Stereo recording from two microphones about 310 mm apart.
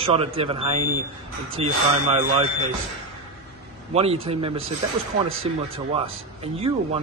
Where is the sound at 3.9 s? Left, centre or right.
Centre.